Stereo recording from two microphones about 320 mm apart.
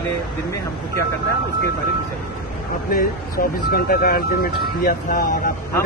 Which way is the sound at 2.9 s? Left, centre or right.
Left.